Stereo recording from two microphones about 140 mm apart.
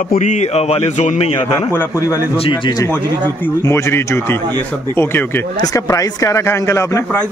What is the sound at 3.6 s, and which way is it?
A man's voice, 20° left (ahead or behind).